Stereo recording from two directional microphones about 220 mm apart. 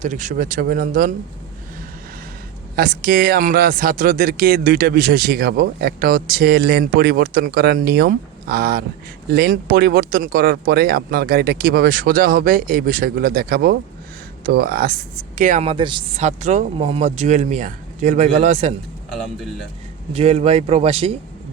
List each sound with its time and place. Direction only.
0.0 s speech: 35° right (ahead or behind)
2.7 s speech: 45° right (ahead or behind)
15.4 s speech: 35° right (ahead or behind)
19.1 s speech: centre (ahead or behind)
20.1 s speech: 30° right (ahead or behind)